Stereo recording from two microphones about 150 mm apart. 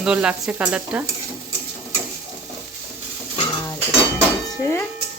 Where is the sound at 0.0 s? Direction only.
5° right (ahead or behind).